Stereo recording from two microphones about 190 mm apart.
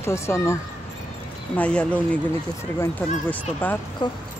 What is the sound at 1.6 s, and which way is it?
Speech, 5° left (ahead or behind).